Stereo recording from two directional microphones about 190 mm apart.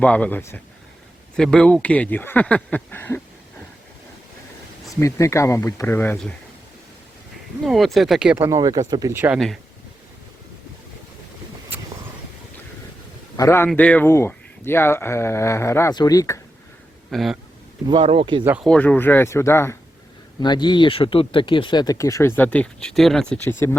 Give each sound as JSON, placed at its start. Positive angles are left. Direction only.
{"t": 0.0, "sound": "speech", "side_deg": 5}
{"t": 4.9, "sound": "speech", "side_deg": 15}
{"t": 7.6, "sound": "speech", "side_deg": 0}
{"t": 8.4, "sound": "speech", "side_deg": -20}
{"t": 11.7, "sound": "vehicle", "side_deg": -10}
{"t": 13.3, "sound": "speech", "side_deg": 15}
{"t": 17.1, "sound": "speech", "side_deg": 0}
{"t": 17.8, "sound": "speech", "side_deg": -30}
{"t": 18.4, "sound": "speech", "side_deg": -5}
{"t": 18.7, "sound": "speech", "side_deg": 5}